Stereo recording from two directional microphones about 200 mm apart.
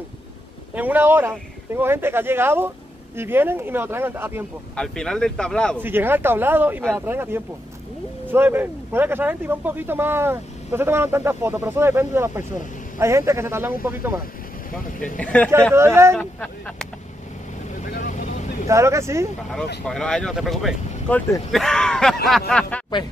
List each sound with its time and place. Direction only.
0.7 s speech: 10° right (ahead or behind)
4.7 s speech: 5° left (ahead or behind)
5.8 s speech: 10° right (ahead or behind)
15.1 s speech: 5° left (ahead or behind)
15.7 s speech: 15° right (ahead or behind)
16.2 s speech: 5° left (ahead or behind)
17.7 s vehicle: 40° left (ahead or behind)
18.7 s speech: 15° right (ahead or behind)
19.8 s speech: 5° left (ahead or behind)